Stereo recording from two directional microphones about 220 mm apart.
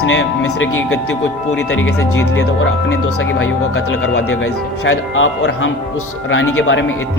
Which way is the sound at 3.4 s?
55° left (ahead or behind).